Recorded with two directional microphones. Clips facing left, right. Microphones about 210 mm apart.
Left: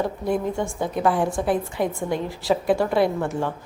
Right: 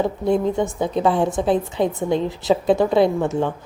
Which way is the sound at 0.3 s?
20° right (ahead or behind).